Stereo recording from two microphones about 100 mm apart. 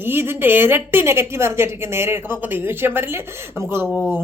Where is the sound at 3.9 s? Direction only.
10° left (ahead or behind).